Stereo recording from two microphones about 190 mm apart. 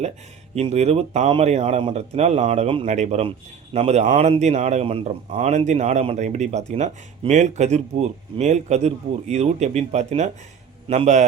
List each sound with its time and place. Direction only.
0.5 s speech: 35° right (ahead or behind)